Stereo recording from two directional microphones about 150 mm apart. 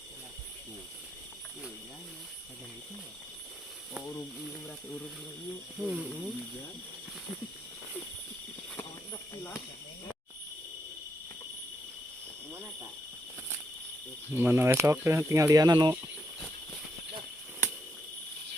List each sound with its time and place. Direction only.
5.8 s speech: 5° right (ahead or behind)
14.3 s speech: 15° right (ahead or behind)